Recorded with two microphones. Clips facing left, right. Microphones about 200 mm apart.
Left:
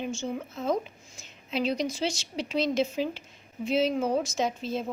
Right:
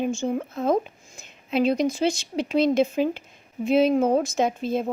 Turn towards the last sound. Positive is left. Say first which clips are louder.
# right 6 dB
turn(degrees=-55)  # may be behind; listen again after turning